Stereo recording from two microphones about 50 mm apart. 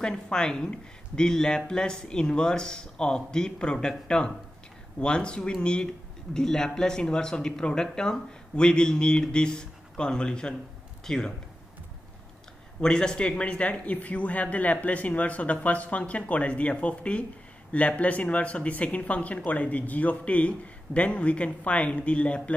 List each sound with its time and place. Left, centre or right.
0.0 s speech: centre
12.8 s speech: centre